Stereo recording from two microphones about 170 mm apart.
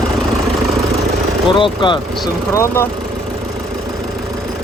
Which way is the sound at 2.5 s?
15° left (ahead or behind).